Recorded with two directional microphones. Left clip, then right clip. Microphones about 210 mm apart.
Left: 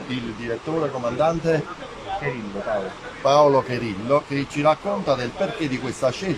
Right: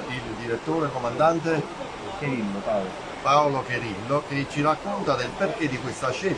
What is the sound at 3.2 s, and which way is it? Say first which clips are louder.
A man's voice: left 5 dB; 25° left (ahead or behind).